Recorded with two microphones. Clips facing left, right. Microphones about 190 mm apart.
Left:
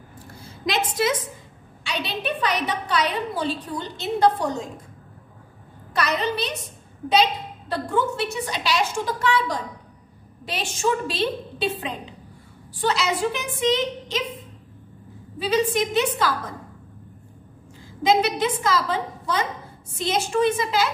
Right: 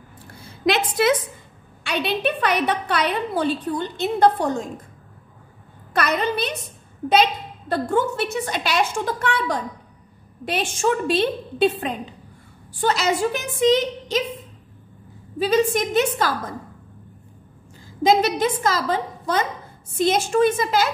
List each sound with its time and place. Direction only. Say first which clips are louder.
0.7 s a woman's voice: right 4 dB; 60° right (ahead or behind)
5.9 s a woman's voice: right 2 dB; 55° right (ahead or behind)
15.3 s a woman's voice: right 3 dB; 45° right (ahead or behind)
18.0 s a woman's voice: right 2 dB; 45° right (ahead or behind)